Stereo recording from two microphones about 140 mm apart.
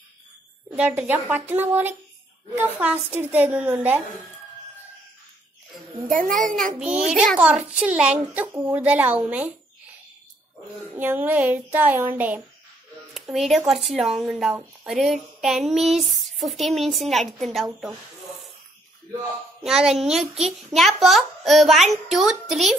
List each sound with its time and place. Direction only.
0.7 s a woman's voice: 10° right (ahead or behind)
6.0 s a child's voice: 70° right (ahead or behind)
6.8 s a woman's voice: 10° right (ahead or behind)
11.0 s a woman's voice: 15° right (ahead or behind)
13.1 s a sound: centre (ahead or behind)
19.6 s a sound: 5° right (ahead or behind)